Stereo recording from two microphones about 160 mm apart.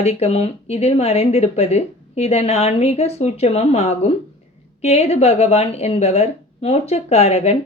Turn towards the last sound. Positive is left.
turn(degrees=40)  # may be behind; listen again after turning